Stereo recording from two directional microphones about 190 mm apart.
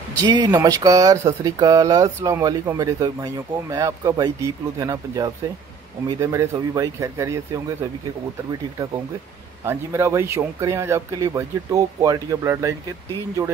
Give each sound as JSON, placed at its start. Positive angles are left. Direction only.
{"t": 0.2, "sound": "speech", "side_deg": -20}
{"t": 9.7, "sound": "speech", "side_deg": -15}